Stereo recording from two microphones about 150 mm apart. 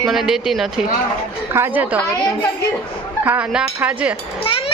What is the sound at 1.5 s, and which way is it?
Speech, 15° right (ahead or behind).